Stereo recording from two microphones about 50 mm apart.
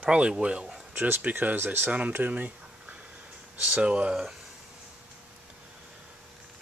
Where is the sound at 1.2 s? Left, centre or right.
Right.